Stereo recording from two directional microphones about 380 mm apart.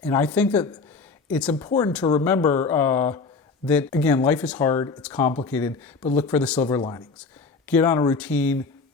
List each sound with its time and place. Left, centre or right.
0.0 s speech: centre